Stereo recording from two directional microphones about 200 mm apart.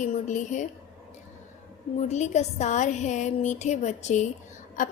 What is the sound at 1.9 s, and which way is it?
A woman's voice, 35° left (ahead or behind).